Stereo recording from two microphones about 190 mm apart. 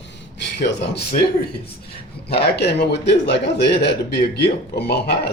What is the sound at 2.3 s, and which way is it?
A man's voice, 60° left (ahead or behind).